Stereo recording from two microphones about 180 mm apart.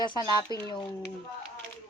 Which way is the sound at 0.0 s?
25° left (ahead or behind).